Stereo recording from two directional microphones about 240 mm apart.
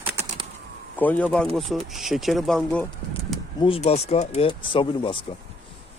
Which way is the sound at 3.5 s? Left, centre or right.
Left.